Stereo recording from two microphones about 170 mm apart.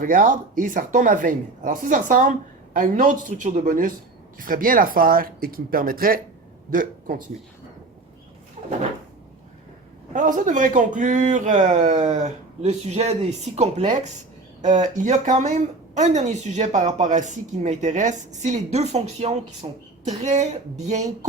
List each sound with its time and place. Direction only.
0.0 s a man's voice: 50° right (ahead or behind)
10.1 s speech: 50° right (ahead or behind)